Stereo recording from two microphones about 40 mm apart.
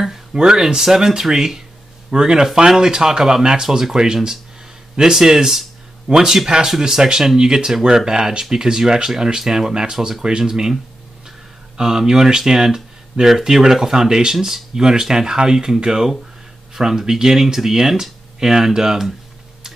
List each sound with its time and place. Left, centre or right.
0.0 s a sound: centre
0.4 s speech: centre
11.7 s speech: centre